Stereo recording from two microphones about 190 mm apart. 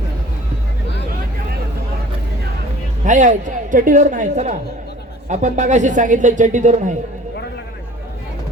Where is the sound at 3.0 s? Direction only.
40° right (ahead or behind).